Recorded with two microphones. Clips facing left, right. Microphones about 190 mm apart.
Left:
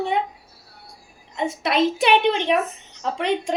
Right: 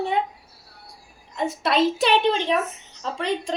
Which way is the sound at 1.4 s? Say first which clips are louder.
Even; 15° left (ahead or behind).